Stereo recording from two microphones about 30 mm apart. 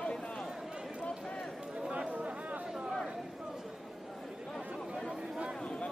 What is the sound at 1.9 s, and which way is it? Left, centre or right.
Chatter, right.